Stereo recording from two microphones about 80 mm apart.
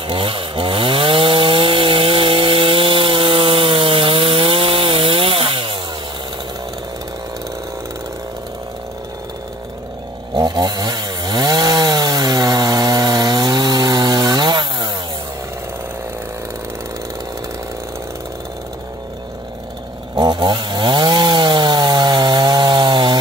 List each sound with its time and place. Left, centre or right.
0.0 s chainsaw: right
10.3 s chainsaw: right
20.2 s chainsaw: right